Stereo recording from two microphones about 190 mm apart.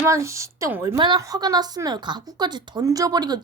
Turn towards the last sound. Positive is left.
turn(degrees=-20)  # may be behind; listen again after turning